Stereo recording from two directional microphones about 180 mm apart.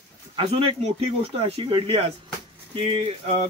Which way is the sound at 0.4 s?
30° right (ahead or behind).